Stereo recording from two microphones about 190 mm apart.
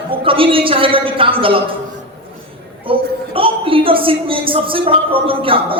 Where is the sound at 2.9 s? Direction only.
30° right (ahead or behind).